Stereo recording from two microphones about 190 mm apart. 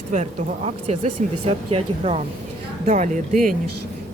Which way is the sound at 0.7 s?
30° right (ahead or behind).